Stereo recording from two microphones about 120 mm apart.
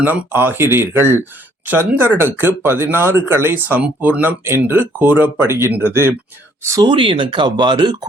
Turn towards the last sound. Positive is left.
turn(degrees=-40)  # may be behind; listen again after turning